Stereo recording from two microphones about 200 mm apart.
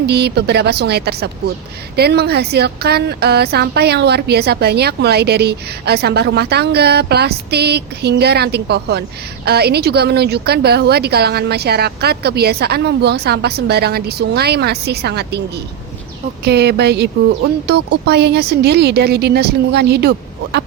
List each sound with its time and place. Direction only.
0.0 s a woman's voice: 55° right (ahead or behind)